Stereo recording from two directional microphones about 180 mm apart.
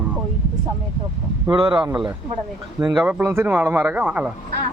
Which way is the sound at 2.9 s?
10° right (ahead or behind).